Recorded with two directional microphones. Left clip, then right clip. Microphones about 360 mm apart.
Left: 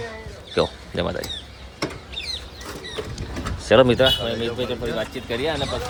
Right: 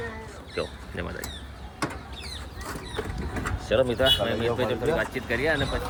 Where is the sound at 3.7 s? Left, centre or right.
Left.